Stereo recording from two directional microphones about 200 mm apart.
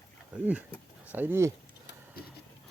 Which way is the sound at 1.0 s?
10° right (ahead or behind).